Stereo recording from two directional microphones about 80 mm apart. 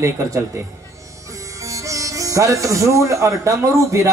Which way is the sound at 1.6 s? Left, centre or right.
Right.